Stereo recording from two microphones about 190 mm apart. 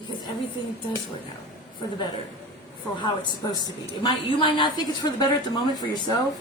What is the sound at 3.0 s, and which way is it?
A woman's voice, 20° left (ahead or behind).